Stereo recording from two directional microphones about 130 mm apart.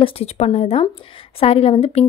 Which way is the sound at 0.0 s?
50° left (ahead or behind).